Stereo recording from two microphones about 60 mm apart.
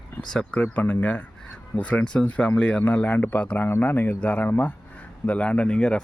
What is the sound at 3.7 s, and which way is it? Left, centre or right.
A man's voice, left.